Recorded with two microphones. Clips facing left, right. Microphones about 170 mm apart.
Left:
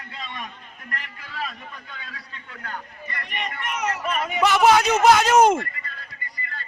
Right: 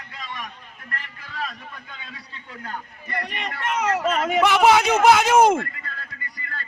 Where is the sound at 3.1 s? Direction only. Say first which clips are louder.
Right 3 dB; 85° right.